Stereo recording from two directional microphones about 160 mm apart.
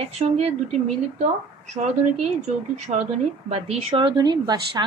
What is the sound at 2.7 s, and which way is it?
Speech, 45° right (ahead or behind).